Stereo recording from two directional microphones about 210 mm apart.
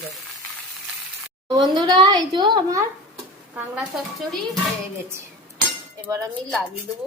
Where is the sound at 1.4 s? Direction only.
20° right (ahead or behind).